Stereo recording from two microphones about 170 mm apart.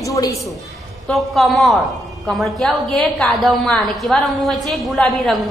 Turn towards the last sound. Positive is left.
turn(degrees=0)  # may be behind; listen again after turning